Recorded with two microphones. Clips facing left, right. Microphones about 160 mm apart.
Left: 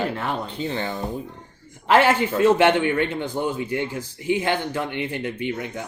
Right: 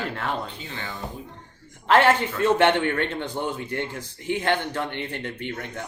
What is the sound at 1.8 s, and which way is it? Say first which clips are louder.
A man's voice: left 1 dB; 5° left (ahead or behind).